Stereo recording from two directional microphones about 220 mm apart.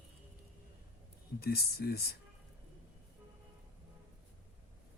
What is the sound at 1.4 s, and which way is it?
Speech, 45° left (ahead or behind).